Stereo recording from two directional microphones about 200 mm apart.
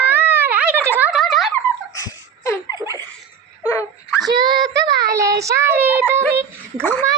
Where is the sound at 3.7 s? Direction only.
10° left (ahead or behind).